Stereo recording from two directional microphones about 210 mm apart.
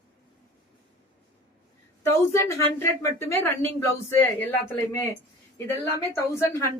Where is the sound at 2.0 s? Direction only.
15° left (ahead or behind).